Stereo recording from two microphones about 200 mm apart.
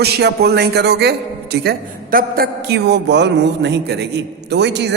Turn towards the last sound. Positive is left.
turn(degrees=-60)  # may be behind; listen again after turning